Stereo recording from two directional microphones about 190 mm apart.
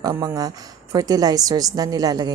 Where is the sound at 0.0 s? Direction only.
20° right (ahead or behind).